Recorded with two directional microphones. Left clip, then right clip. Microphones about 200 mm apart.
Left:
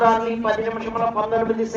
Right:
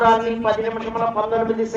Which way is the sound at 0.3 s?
5° right (ahead or behind).